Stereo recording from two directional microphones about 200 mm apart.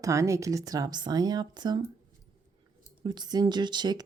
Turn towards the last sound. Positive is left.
turn(degrees=-20)  # may be behind; listen again after turning